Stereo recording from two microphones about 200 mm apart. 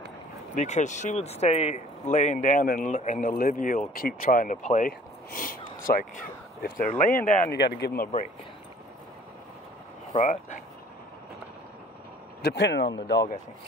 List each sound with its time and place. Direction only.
0.6 s speech: 35° left (ahead or behind)
7.5 s speech: 55° left (ahead or behind)
10.1 s speech: 40° left (ahead or behind)
12.4 s speech: 55° left (ahead or behind)